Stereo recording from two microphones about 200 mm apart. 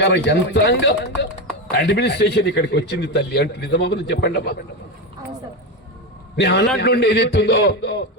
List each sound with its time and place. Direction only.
0.0 s speech: 60° left (ahead or behind)
6.3 s speech: 55° left (ahead or behind)